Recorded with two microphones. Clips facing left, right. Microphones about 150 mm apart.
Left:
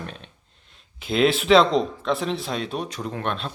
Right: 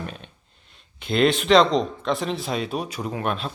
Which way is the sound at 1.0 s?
Centre (ahead or behind).